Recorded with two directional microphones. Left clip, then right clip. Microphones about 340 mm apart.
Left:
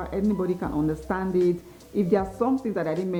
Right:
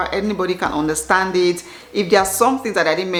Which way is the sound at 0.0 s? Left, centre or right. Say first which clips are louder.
Right 8 dB; centre.